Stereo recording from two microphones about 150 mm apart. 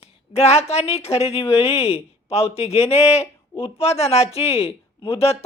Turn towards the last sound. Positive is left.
turn(degrees=40)  # may be behind; listen again after turning